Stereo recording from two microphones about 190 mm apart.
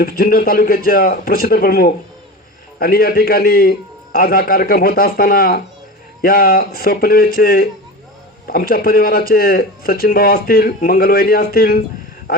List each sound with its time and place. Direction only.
0.0 s a man's voice: 50° left (ahead or behind)